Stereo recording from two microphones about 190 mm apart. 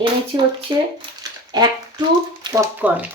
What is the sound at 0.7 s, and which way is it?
Speech, 25° right (ahead or behind).